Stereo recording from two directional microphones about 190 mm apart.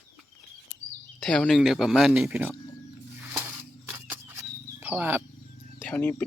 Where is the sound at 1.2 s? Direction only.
5° left (ahead or behind).